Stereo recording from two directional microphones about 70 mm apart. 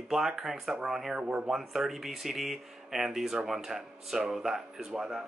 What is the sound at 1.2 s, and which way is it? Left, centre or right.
Speech, centre.